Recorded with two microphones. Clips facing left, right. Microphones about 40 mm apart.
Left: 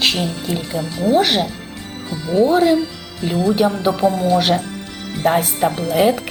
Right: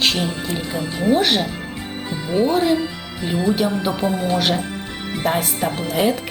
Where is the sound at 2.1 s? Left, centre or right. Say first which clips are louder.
Left 4 dB; right.